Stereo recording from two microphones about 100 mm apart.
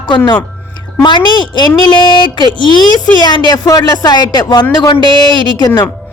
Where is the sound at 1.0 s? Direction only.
50° left (ahead or behind).